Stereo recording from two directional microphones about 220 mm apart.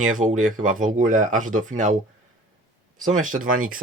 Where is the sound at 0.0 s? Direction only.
35° right (ahead or behind).